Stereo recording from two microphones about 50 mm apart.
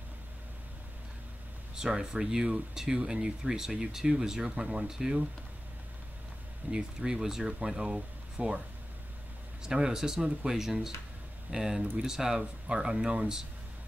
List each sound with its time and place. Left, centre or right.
1.8 s speech: centre
6.7 s speech: centre
9.6 s speech: centre